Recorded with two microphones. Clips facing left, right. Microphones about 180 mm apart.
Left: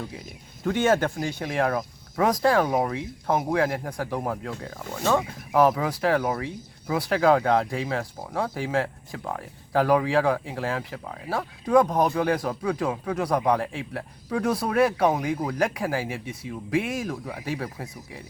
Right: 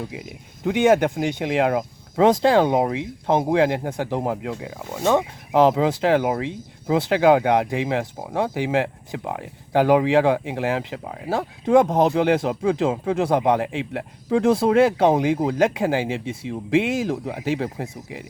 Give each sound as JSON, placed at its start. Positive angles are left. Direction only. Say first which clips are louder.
{"t": 0.1, "sound": "speech", "louder": "right 5 dB", "side_deg": -15}